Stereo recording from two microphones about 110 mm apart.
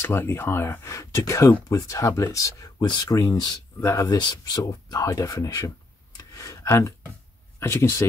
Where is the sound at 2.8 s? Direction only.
40° left (ahead or behind).